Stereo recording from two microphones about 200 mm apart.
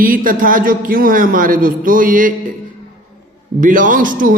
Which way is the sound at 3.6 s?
40° right (ahead or behind).